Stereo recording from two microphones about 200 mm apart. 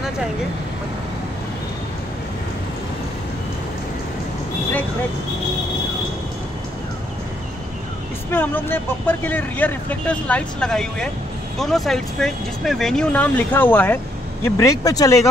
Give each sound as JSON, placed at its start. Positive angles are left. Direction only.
{"t": 8.3, "sound": "speech", "side_deg": 10}